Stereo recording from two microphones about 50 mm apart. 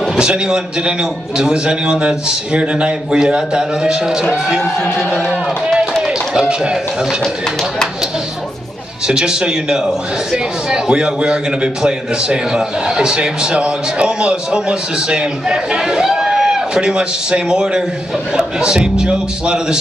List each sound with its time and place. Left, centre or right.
0.2 s a man's voice: centre
5.3 s speech: right
9.0 s a man's voice: centre